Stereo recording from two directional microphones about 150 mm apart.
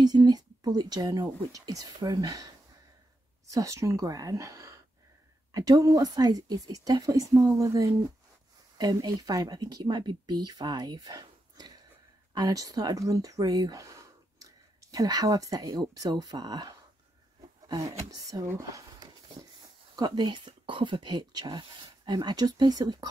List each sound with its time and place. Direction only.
0.0 s a woman's voice: 25° right (ahead or behind)